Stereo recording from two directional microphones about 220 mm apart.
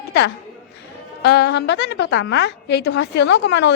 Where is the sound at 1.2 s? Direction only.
45° left (ahead or behind).